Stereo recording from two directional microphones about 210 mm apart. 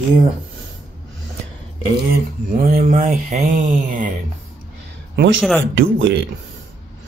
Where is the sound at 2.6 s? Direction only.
40° right (ahead or behind).